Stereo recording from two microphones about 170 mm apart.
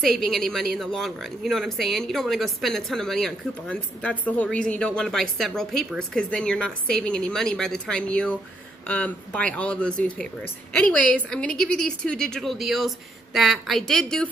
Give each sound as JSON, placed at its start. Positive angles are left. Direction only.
{"t": 0.0, "sound": "a woman's voice", "side_deg": 0}